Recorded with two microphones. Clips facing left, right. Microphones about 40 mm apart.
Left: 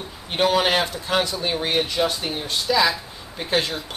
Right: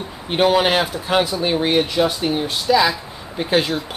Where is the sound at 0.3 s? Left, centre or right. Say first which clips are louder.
Right 4 dB; centre.